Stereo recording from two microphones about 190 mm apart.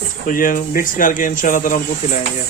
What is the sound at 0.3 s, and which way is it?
Speech, 45° left (ahead or behind).